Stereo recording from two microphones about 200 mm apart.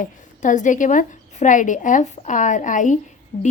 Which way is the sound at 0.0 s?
40° left (ahead or behind).